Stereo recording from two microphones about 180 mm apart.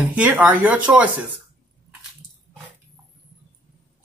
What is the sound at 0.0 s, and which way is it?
A woman's voice, 10° right (ahead or behind).